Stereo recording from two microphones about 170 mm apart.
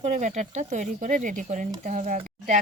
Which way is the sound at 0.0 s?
45° right (ahead or behind).